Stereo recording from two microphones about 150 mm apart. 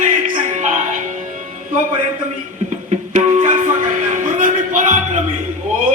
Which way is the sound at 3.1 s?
55° right (ahead or behind).